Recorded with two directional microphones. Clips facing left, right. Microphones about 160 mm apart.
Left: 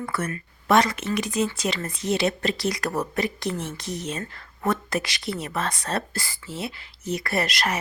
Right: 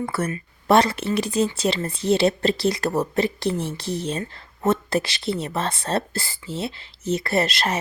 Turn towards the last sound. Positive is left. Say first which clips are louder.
# right 3 dB
turn(degrees=-30)  # may be behind; listen again after turning